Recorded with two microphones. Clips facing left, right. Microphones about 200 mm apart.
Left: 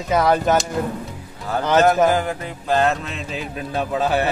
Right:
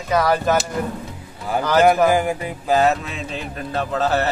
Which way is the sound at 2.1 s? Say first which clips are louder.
Right 2 dB; 10° right (ahead or behind).